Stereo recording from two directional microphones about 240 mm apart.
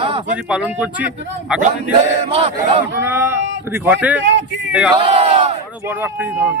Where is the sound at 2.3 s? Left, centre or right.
Right.